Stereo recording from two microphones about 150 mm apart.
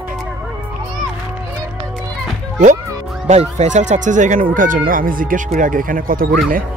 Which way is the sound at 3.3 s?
50° right (ahead or behind).